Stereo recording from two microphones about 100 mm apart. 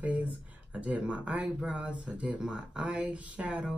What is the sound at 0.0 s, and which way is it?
Speech, 15° right (ahead or behind).